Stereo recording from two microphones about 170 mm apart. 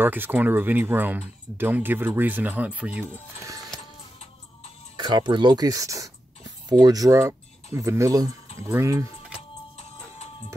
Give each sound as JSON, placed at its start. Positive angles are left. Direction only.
{"t": 0.0, "sound": "speech", "side_deg": -10}
{"t": 4.9, "sound": "speech", "side_deg": -25}
{"t": 9.8, "sound": "music", "side_deg": 40}